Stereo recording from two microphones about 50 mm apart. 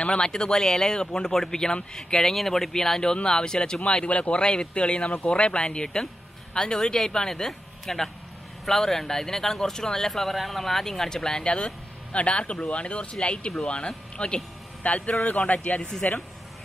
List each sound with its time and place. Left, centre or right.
0.0 s speech: centre
15.8 s speech: centre